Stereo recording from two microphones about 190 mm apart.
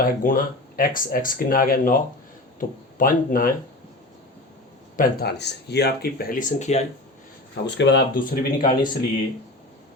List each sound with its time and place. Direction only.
0.0 s speech: 45° left (ahead or behind)
4.9 s speech: 60° left (ahead or behind); by 6.8 s 35° left (ahead or behind)
7.5 s speech: 65° left (ahead or behind)
8.2 s speech: 45° left (ahead or behind)